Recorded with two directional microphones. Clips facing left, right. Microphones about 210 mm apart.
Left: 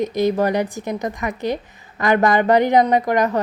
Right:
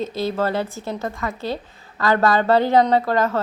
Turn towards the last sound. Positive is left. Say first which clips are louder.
# left 1 dB
turn(degrees=15)  # may be behind; listen again after turning